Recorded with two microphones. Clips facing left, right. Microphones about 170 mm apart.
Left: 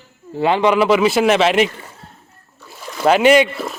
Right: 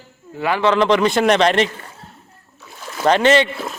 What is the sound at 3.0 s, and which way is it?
Speech, 10° left (ahead or behind).